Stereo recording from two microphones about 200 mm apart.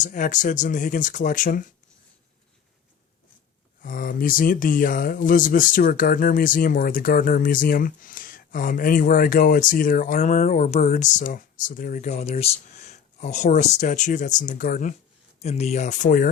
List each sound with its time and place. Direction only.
0.0 s speech: 40° left (ahead or behind)
3.8 s speech: 45° left (ahead or behind)